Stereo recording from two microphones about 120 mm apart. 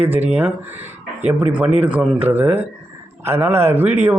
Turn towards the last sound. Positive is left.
turn(degrees=-15)  # may be behind; listen again after turning